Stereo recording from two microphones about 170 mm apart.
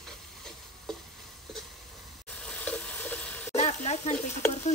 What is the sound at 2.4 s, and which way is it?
Frying, 10° left (ahead or behind).